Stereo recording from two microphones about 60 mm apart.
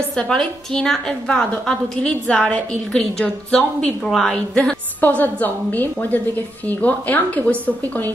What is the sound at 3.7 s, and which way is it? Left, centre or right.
A woman's voice, centre.